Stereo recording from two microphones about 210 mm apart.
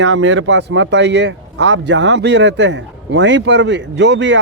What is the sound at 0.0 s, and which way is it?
Speech, 60° right (ahead or behind).